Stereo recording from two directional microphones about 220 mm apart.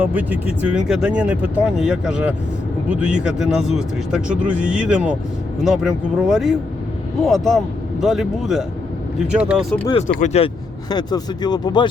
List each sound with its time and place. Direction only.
0.0 s speech: 5° right (ahead or behind)
10.2 s speech: 30° left (ahead or behind)